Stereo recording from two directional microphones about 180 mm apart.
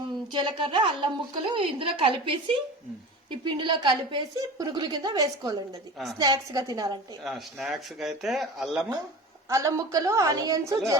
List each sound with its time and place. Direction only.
0.3 s a woman's voice: 25° right (ahead or behind)
7.3 s speech: centre (ahead or behind)
9.5 s a woman's voice: 15° right (ahead or behind)